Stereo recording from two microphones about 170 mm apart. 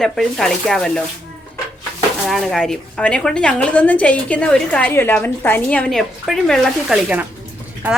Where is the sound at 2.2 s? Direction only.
Centre (ahead or behind).